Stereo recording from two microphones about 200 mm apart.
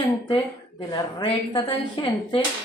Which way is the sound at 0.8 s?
20° left (ahead or behind).